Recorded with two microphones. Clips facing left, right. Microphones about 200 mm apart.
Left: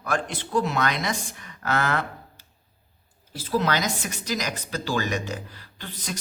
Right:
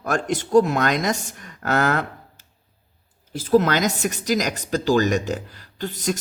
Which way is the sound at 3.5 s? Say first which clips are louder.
Right 7 dB; 45° right (ahead or behind).